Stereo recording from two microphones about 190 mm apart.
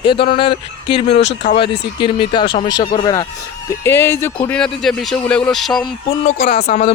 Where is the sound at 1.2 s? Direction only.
70° left (ahead or behind).